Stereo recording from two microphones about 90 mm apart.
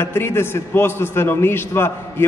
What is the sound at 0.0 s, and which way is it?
A man's voice, 25° left (ahead or behind).